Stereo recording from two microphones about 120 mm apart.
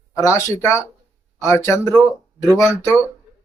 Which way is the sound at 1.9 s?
5° left (ahead or behind).